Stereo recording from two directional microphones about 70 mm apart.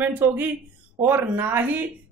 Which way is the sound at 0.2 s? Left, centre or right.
Right.